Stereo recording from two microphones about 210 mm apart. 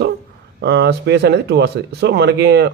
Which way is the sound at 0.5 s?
55° right (ahead or behind).